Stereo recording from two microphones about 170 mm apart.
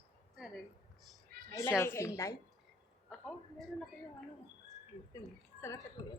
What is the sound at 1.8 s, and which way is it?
Speech, 15° left (ahead or behind).